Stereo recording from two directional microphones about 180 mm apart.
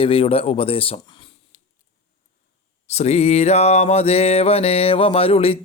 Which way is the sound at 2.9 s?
35° left (ahead or behind).